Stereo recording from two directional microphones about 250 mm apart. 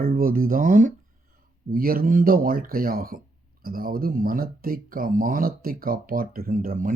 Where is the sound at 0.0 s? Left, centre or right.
Right.